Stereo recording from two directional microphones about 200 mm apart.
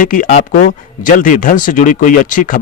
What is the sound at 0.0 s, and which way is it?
Speech, 40° left (ahead or behind).